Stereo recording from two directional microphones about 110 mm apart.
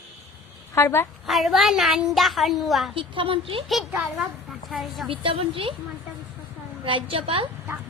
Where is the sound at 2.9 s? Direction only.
55° right (ahead or behind).